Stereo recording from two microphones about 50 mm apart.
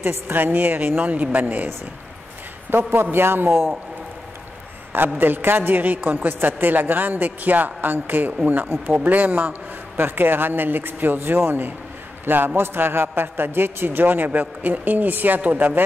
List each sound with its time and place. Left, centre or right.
0.0 s a man's voice: right
2.7 s a man's voice: right
4.9 s a man's voice: right